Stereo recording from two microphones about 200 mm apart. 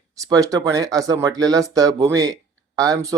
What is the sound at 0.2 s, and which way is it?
Speech, 15° right (ahead or behind).